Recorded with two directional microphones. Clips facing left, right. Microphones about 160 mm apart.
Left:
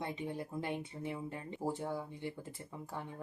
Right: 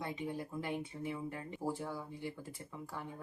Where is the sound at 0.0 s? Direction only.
25° left (ahead or behind).